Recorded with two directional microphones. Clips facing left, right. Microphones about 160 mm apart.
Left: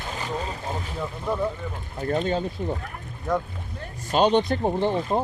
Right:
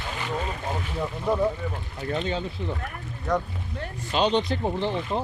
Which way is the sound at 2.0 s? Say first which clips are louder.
Left 4 dB; 45° left (ahead or behind).